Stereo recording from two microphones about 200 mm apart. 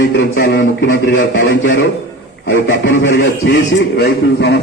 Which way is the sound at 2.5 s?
55° left (ahead or behind).